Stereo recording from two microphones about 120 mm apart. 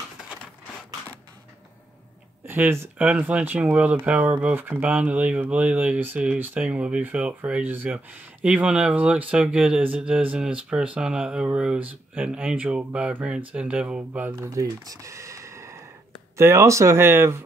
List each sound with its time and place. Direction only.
2.4 s speech: 15° right (ahead or behind)
14.3 s speech: 30° right (ahead or behind)